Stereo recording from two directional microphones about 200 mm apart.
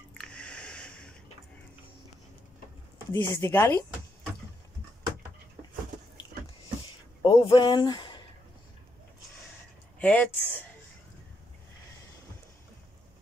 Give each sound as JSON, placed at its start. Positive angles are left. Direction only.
{"t": 0.1, "sound": "a sound", "side_deg": 5}
{"t": 3.1, "sound": "speech", "side_deg": 10}
{"t": 7.2, "sound": "speech", "side_deg": 25}
{"t": 9.9, "sound": "speech", "side_deg": 10}